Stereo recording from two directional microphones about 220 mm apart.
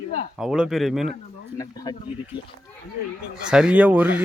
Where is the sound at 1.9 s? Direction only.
20° left (ahead or behind).